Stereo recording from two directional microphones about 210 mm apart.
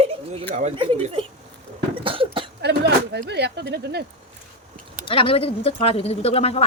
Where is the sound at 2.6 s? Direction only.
50° right (ahead or behind).